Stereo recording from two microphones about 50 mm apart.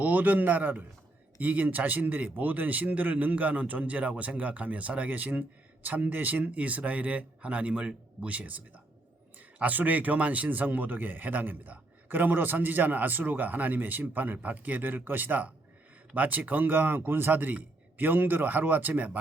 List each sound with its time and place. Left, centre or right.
0.0 s a man's voice: right